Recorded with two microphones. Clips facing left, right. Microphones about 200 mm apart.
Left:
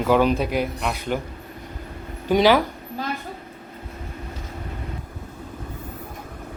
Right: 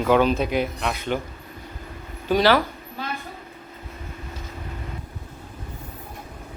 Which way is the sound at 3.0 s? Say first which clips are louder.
Left 3 dB; 40° left (ahead or behind).